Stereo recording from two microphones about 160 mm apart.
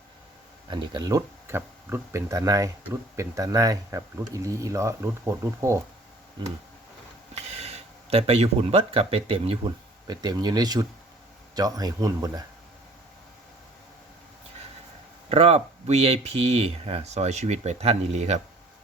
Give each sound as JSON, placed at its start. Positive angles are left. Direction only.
{"t": 0.7, "sound": "speech", "side_deg": -25}
{"t": 7.3, "sound": "speech", "side_deg": -40}
{"t": 15.3, "sound": "speech", "side_deg": -40}